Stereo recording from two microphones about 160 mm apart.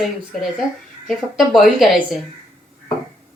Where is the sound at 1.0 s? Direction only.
Centre (ahead or behind).